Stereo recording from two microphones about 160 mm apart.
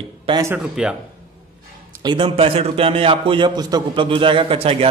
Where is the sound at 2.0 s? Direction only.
30° right (ahead or behind).